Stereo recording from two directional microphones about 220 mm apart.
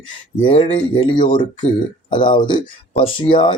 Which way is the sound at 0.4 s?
25° left (ahead or behind).